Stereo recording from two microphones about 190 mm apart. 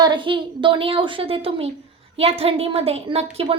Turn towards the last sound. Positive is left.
turn(degrees=-30)  # may be behind; listen again after turning